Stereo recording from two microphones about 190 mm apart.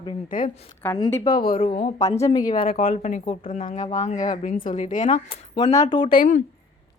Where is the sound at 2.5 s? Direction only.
25° left (ahead or behind).